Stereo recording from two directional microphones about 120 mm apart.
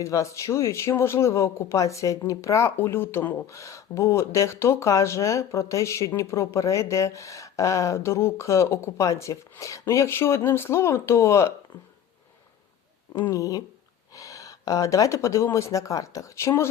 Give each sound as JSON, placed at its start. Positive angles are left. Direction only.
{"t": 0.0, "sound": "speech", "side_deg": 25}
{"t": 13.3, "sound": "speech", "side_deg": 30}